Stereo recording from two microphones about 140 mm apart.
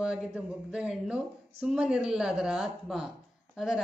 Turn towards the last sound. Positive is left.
turn(degrees=0)  # may be behind; listen again after turning